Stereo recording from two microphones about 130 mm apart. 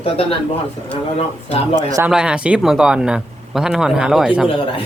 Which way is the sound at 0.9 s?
50° left (ahead or behind).